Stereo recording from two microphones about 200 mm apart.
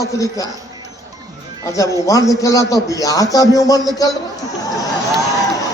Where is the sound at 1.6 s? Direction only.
15° left (ahead or behind).